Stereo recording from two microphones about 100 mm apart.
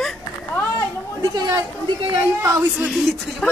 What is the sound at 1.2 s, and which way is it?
Speech, 40° right (ahead or behind).